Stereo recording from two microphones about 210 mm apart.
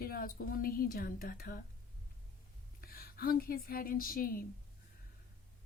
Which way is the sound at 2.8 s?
45° left (ahead or behind).